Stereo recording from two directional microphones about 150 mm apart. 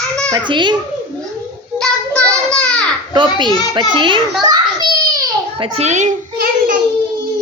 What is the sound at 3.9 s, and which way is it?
Speech, 35° right (ahead or behind).